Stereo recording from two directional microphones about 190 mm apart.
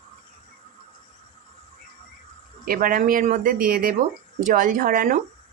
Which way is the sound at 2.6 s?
50° right (ahead or behind).